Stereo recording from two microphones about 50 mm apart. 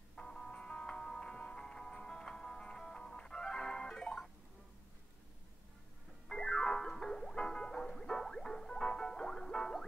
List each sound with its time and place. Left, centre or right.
0.1 s music: centre
6.2 s music: centre